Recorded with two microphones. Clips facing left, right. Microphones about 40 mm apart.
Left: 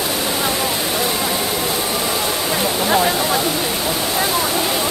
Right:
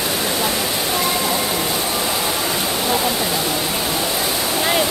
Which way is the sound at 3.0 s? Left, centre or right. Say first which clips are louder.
Left 3 dB; centre.